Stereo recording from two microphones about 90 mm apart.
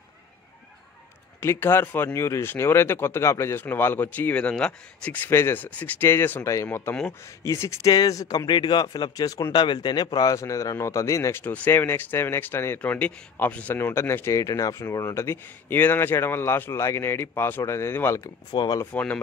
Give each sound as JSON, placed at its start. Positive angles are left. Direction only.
{"t": 1.4, "sound": "a man's voice", "side_deg": 30}
{"t": 7.9, "sound": "speech", "side_deg": 45}
{"t": 8.5, "sound": "speech", "side_deg": 60}
{"t": 9.5, "sound": "a man's voice", "side_deg": 60}
{"t": 11.5, "sound": "speech", "side_deg": 20}
{"t": 18.5, "sound": "speech", "side_deg": 50}
{"t": 18.9, "sound": "speech", "side_deg": 15}